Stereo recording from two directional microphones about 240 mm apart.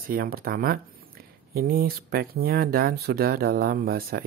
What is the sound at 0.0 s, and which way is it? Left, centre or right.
Speech, right.